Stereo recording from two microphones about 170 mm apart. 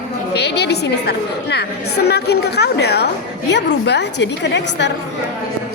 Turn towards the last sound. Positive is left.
turn(degrees=90)